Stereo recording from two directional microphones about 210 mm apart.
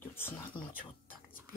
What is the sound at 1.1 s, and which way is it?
Whispering, 40° left (ahead or behind).